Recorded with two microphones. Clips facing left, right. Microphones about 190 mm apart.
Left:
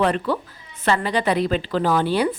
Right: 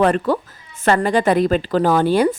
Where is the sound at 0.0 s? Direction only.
45° right (ahead or behind).